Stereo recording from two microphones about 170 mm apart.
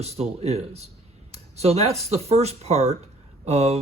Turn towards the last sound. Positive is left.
turn(degrees=-40)  # may be behind; listen again after turning